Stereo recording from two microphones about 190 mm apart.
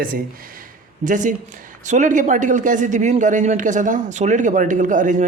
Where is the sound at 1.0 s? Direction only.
40° right (ahead or behind).